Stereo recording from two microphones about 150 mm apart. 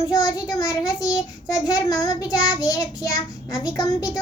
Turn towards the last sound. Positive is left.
turn(degrees=25)  # may be behind; listen again after turning